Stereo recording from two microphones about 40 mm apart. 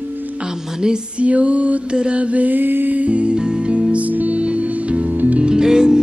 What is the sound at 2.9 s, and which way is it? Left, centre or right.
Music, right.